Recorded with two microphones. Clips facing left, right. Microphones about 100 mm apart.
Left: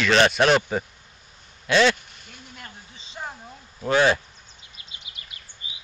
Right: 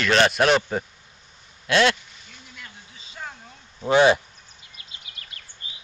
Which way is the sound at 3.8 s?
20° right (ahead or behind).